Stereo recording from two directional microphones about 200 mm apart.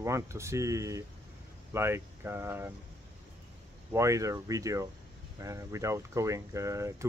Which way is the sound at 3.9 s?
15° right (ahead or behind).